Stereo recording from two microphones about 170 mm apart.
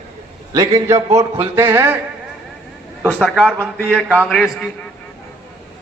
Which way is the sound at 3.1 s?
Centre (ahead or behind).